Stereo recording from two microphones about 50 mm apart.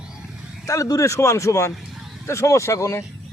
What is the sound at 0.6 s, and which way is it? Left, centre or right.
A man's voice, left.